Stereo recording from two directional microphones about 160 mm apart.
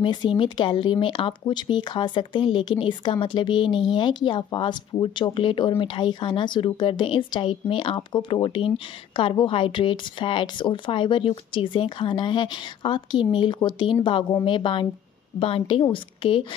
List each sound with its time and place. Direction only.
0.0 s speech: 30° left (ahead or behind)